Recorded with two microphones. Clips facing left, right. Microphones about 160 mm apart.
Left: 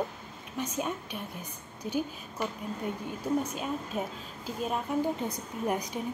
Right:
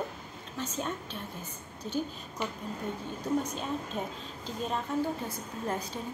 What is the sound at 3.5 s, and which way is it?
A woman's voice, 10° left (ahead or behind).